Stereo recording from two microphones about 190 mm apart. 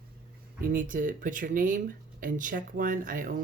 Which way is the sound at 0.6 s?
45° right (ahead or behind).